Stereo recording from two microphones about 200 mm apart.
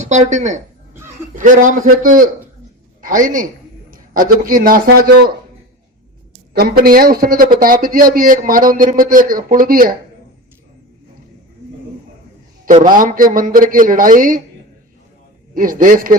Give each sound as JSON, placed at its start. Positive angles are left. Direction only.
{"t": 0.0, "sound": "a man's voice", "side_deg": -35}
{"t": 6.6, "sound": "speech", "side_deg": -45}
{"t": 13.0, "sound": "speech", "side_deg": -45}
{"t": 15.5, "sound": "speech", "side_deg": -45}